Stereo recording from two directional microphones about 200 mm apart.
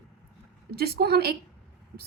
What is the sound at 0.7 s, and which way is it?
Speech, 50° right (ahead or behind).